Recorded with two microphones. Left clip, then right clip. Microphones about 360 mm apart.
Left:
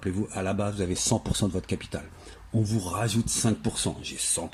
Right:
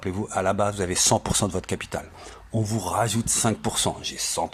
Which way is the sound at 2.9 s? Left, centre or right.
Centre.